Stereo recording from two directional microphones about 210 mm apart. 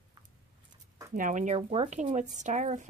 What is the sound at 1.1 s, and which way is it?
Speech, 40° right (ahead or behind).